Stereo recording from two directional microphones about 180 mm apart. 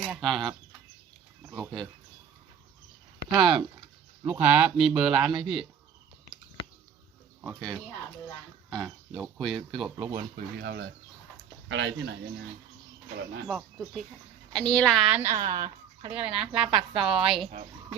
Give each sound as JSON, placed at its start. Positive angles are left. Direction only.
{"t": 0.0, "sound": "speech", "side_deg": 0}
{"t": 3.3, "sound": "speech", "side_deg": -25}
{"t": 4.3, "sound": "speech", "side_deg": -10}
{"t": 7.4, "sound": "speech", "side_deg": 0}
{"t": 10.2, "sound": "speech", "side_deg": -60}
{"t": 11.7, "sound": "speech", "side_deg": -90}
{"t": 13.5, "sound": "speech", "side_deg": 0}
{"t": 16.1, "sound": "speech", "side_deg": -5}
{"t": 16.5, "sound": "a woman's voice", "side_deg": -30}